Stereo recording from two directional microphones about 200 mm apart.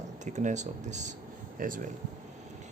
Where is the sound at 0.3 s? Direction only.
35° right (ahead or behind).